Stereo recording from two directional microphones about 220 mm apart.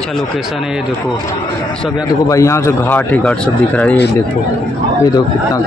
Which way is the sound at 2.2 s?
15° left (ahead or behind).